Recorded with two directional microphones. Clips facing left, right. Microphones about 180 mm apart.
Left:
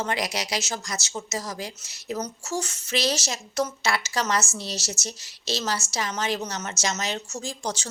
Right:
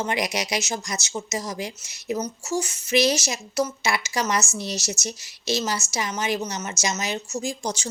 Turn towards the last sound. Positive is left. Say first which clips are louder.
# right 3 dB
turn(degrees=-10)  # may be behind; listen again after turning